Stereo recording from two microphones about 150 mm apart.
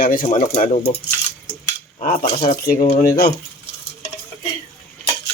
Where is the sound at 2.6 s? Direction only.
80° left.